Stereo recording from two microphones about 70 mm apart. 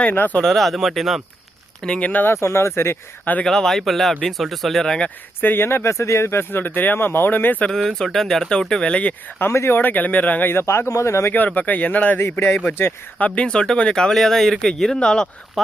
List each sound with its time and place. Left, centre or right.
0.1 s speech: left
0.4 s speech: centre
1.8 s speech: centre
2.2 s speech: left
3.4 s speech: centre
5.4 s speech: left
7.6 s speech: centre
9.4 s speech: left
11.3 s speech: left
12.2 s speech: left
13.2 s speech: centre
15.6 s speech: centre